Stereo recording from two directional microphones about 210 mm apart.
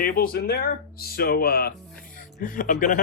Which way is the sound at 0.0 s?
45° left (ahead or behind).